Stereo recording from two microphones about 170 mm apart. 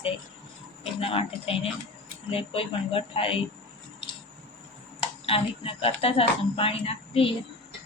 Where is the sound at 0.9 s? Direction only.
35° left (ahead or behind).